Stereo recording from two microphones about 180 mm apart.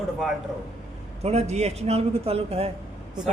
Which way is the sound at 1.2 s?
35° right (ahead or behind).